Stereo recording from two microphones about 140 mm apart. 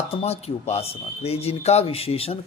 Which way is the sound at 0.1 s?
45° left (ahead or behind).